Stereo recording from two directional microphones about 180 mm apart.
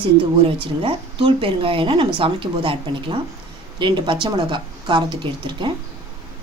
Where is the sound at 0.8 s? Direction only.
30° right (ahead or behind).